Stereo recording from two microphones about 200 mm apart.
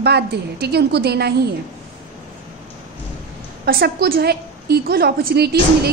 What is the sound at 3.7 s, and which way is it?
A woman's voice, 50° right (ahead or behind).